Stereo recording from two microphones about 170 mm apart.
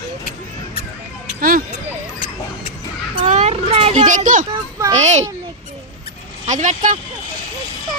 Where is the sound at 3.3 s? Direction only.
40° right (ahead or behind).